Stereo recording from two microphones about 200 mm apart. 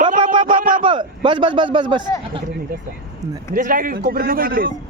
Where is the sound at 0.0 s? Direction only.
45° right (ahead or behind).